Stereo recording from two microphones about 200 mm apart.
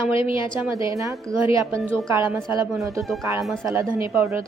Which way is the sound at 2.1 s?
15° right (ahead or behind).